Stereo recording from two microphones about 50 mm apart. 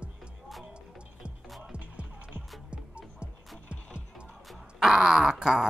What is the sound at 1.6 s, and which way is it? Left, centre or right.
Music, right.